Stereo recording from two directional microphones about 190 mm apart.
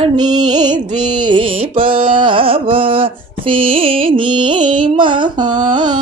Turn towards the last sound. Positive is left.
turn(degrees=-25)  # may be behind; listen again after turning